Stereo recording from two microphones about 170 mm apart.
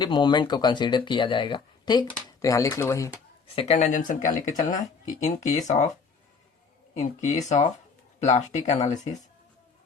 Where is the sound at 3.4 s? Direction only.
35° left (ahead or behind).